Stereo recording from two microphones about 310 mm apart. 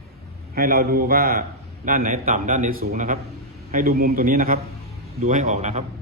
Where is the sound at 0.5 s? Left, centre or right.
Right.